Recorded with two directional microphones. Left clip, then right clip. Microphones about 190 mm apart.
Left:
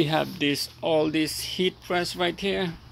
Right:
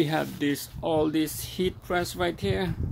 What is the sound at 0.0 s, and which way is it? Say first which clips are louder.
Speech: left 2 dB; 5° left (ahead or behind).